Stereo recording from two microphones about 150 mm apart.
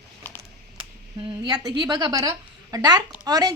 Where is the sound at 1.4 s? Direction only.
25° right (ahead or behind).